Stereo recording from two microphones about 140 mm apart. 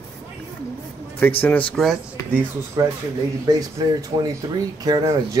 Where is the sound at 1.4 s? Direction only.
10° left (ahead or behind).